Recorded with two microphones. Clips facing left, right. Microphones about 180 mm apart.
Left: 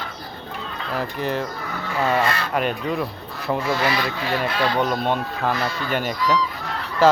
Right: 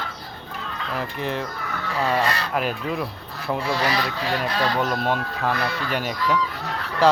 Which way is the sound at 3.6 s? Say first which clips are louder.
Even; 35° right (ahead or behind).